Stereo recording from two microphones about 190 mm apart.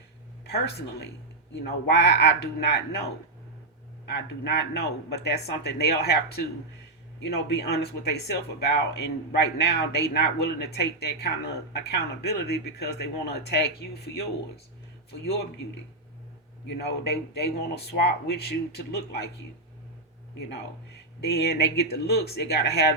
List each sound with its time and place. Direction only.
0.4 s speech: 60° left (ahead or behind)
4.0 s speech: 60° left (ahead or behind)
7.2 s speech: 60° left (ahead or behind)
16.6 s speech: 60° left (ahead or behind)
21.2 s speech: 60° left (ahead or behind)